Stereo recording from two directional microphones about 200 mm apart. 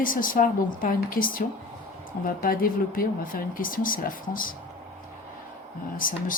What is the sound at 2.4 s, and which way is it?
Speech, 45° left (ahead or behind).